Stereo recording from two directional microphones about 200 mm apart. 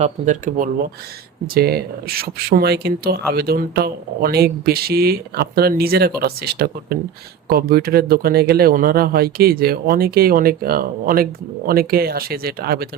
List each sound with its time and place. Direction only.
0.0 s speech: 40° right (ahead or behind)